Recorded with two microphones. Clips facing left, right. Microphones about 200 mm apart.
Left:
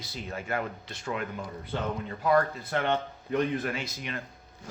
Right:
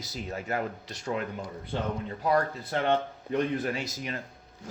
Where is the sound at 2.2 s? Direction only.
35° right (ahead or behind).